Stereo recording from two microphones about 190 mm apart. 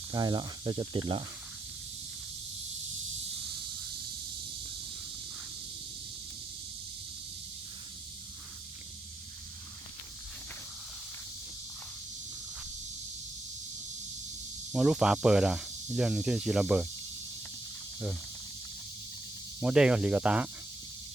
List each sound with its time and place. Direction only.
0.1 s speech: 20° right (ahead or behind)
14.7 s speech: 5° right (ahead or behind)
19.5 s speech: 5° right (ahead or behind)